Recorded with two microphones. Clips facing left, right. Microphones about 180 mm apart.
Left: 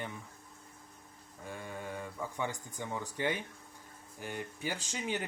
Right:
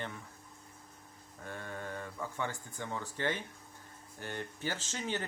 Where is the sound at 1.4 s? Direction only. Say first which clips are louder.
Even; 10° left (ahead or behind).